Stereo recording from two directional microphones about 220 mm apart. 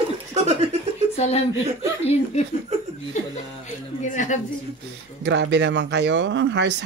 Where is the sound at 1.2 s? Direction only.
30° left (ahead or behind).